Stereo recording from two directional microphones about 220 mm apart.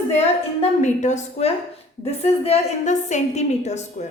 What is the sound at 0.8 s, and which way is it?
A woman's voice, 30° left (ahead or behind).